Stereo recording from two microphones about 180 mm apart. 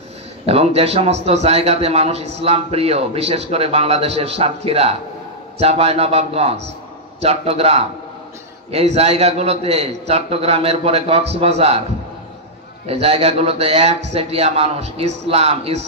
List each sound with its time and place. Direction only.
0.5 s a man's voice: 35° right (ahead or behind)
12.8 s a man's voice: 35° right (ahead or behind)